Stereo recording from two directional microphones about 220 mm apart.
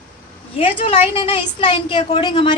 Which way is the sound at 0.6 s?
25° left (ahead or behind).